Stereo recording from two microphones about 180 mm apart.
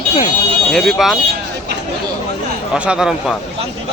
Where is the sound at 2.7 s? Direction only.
5° right (ahead or behind).